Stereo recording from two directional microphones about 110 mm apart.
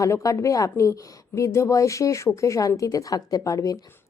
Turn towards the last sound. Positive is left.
turn(degrees=30)  # may be behind; listen again after turning